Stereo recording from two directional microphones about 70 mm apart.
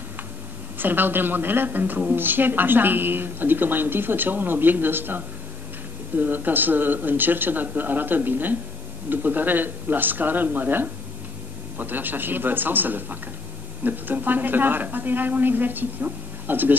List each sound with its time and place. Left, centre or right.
0.7 s a woman's voice: right